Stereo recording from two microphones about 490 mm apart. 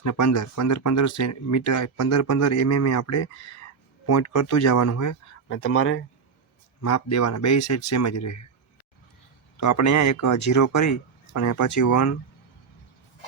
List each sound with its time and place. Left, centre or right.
0.0 s speech: left
9.6 s speech: left